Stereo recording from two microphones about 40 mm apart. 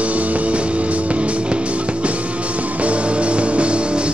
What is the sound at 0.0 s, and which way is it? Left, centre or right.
Music, right.